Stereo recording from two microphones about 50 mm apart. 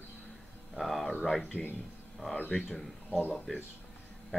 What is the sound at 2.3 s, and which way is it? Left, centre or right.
Speech, left.